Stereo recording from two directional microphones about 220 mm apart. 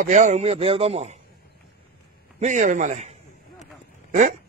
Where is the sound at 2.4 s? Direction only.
35° right (ahead or behind).